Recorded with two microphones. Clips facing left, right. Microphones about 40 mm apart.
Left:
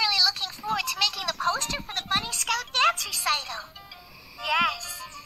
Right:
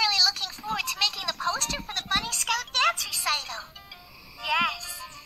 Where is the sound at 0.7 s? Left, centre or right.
Centre.